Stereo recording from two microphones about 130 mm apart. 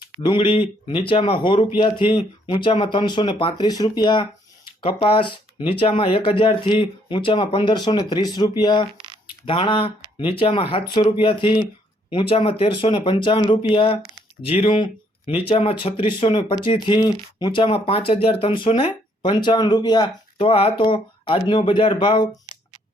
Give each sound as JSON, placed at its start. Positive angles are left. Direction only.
{"t": 0.0, "sound": "speech", "side_deg": 35}
{"t": 9.0, "sound": "a sound", "side_deg": -40}
{"t": 9.5, "sound": "speech", "side_deg": 40}
{"t": 19.2, "sound": "speech", "side_deg": 35}
{"t": 20.5, "sound": "speech", "side_deg": 45}